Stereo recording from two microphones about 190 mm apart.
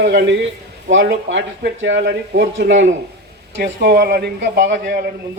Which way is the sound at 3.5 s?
65° right (ahead or behind).